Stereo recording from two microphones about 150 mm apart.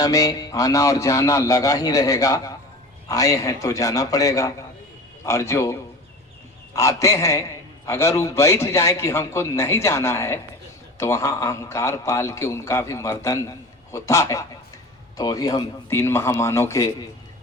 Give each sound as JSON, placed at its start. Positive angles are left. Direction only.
{"t": 0.0, "sound": "speech", "side_deg": 25}
{"t": 6.7, "sound": "speech", "side_deg": 20}